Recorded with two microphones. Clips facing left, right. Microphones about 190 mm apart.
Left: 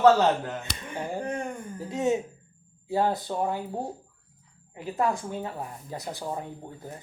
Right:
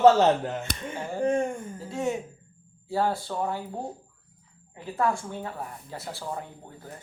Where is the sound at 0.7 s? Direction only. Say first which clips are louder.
Right 3 dB; 50° right (ahead or behind).